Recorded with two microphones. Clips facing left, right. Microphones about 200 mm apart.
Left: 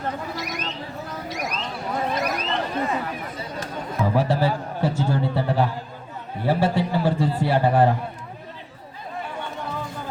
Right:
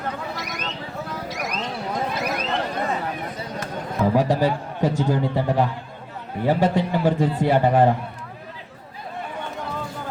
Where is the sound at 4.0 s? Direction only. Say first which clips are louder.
Right 2 dB; 15° right (ahead or behind).